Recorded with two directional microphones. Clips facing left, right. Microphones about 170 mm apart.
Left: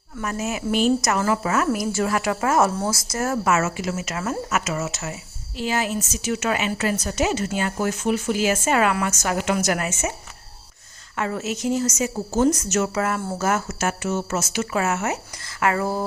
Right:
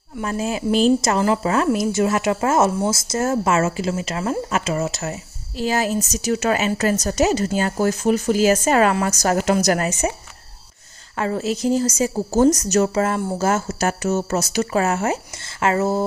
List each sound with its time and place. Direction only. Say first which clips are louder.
0.2 s a woman's voice: right 3 dB; 30° right (ahead or behind)
11.2 s a woman's voice: right 4 dB; 35° right (ahead or behind)